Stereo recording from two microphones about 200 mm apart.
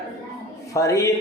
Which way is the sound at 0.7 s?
15° left (ahead or behind).